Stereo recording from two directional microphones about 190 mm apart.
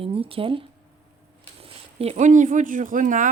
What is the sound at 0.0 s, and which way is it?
Speech, 30° right (ahead or behind).